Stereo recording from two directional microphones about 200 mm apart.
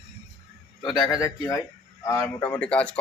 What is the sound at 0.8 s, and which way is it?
Speech, 20° left (ahead or behind).